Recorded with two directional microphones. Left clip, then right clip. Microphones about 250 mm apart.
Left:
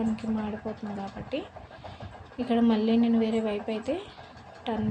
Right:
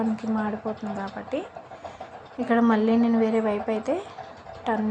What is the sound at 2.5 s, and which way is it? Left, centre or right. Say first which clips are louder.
Speech: right 4 dB; centre.